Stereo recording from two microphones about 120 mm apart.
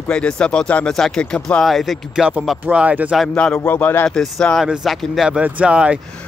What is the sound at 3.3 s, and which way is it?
Speech, 10° left (ahead or behind).